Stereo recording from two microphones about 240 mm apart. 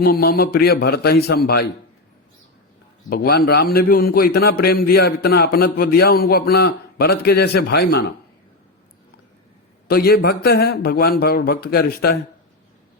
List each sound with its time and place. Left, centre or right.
0.0 s a man's voice: left
3.1 s a man's voice: left
9.9 s a man's voice: left